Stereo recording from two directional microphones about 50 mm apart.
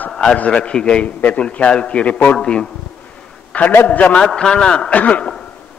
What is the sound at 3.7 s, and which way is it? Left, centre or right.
Speech, left.